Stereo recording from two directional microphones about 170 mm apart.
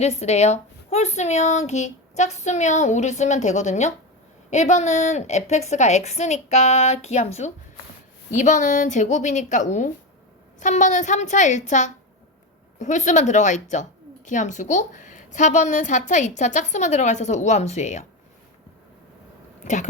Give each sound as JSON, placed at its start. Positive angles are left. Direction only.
{"t": 0.0, "sound": "a woman's voice", "side_deg": 40}
{"t": 19.6, "sound": "a woman's voice", "side_deg": 45}